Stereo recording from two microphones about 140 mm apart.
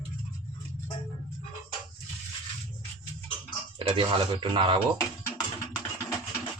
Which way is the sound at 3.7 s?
40° right (ahead or behind).